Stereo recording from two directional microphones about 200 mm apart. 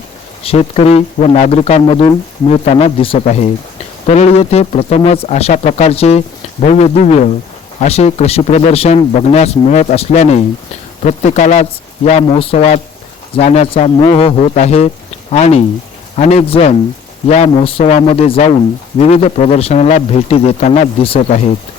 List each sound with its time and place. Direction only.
0.4 s speech: 30° left (ahead or behind)